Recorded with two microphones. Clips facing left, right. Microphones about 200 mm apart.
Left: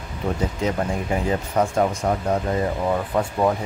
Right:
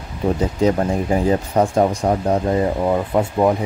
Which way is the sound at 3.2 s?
20° right (ahead or behind).